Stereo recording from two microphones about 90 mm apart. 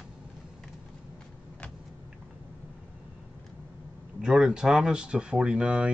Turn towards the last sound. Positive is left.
turn(degrees=-10)  # may be behind; listen again after turning